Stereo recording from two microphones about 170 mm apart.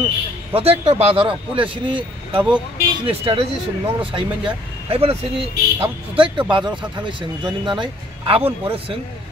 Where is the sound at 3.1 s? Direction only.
35° right (ahead or behind).